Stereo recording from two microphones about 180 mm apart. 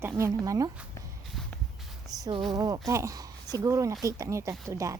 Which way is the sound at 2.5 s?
20° right (ahead or behind).